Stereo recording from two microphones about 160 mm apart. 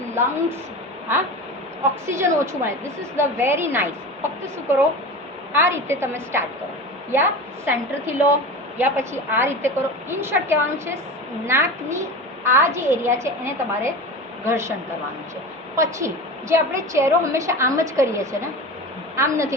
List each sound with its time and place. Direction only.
0.1 s a woman's voice: 15° right (ahead or behind)
5.5 s a woman's voice: 15° right (ahead or behind)
15.7 s a woman's voice: 20° right (ahead or behind)